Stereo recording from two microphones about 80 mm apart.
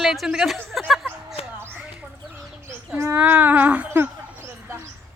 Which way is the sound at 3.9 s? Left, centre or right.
Right.